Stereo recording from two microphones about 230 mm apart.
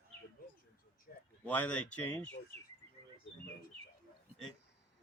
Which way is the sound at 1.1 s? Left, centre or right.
Left.